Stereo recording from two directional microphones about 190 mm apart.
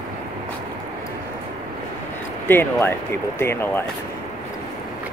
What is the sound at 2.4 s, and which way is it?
Speech, 10° left (ahead or behind).